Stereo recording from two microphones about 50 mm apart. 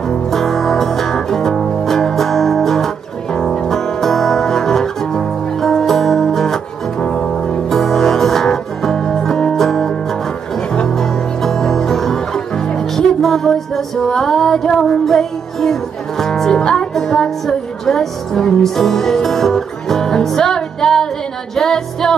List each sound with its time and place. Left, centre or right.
0.3 s music: centre